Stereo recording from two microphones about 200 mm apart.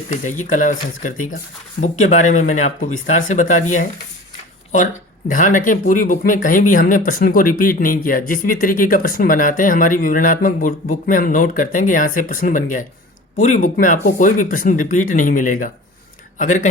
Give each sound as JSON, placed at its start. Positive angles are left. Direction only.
{"t": 0.3, "sound": "speech", "side_deg": 40}
{"t": 5.3, "sound": "speech", "side_deg": 40}